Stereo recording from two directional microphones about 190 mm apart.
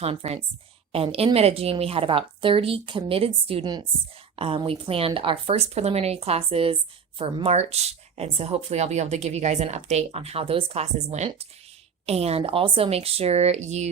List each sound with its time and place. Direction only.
0.0 s a woman's voice: 30° right (ahead or behind)